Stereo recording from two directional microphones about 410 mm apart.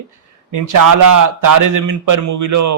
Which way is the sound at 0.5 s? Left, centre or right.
Right.